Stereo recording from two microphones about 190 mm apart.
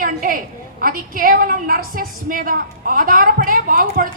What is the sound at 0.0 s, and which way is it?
A woman's voice, 45° right (ahead or behind).